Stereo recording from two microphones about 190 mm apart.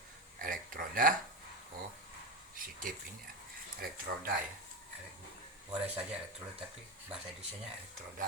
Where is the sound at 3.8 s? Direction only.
50° right (ahead or behind).